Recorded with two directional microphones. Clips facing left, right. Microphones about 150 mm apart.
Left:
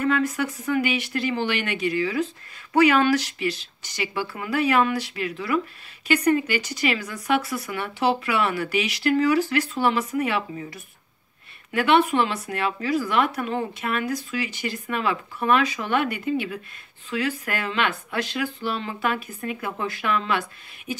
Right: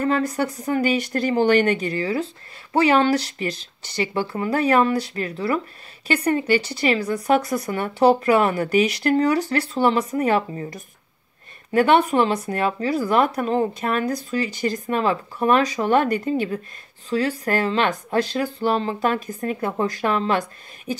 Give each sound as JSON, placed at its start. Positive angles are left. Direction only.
{"t": 0.0, "sound": "speech", "side_deg": -35}